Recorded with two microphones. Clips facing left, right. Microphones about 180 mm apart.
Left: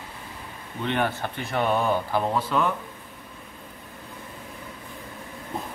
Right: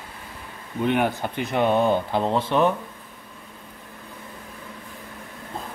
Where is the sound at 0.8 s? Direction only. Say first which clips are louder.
Right 4 dB; 10° right (ahead or behind).